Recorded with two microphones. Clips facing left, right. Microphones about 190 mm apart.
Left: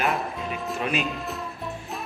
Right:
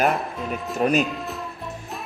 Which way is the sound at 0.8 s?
45° right (ahead or behind).